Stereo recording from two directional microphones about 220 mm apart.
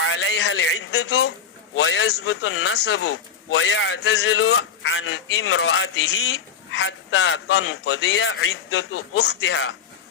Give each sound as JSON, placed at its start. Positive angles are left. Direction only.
{"t": 0.0, "sound": "a man's voice", "side_deg": 60}